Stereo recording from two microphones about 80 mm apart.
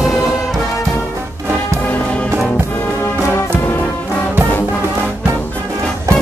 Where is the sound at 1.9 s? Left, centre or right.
Centre.